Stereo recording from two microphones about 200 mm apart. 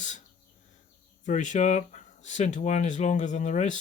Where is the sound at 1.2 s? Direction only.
35° left (ahead or behind).